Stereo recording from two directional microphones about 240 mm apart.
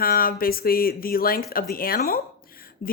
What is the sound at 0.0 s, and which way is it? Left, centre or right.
A woman's voice, left.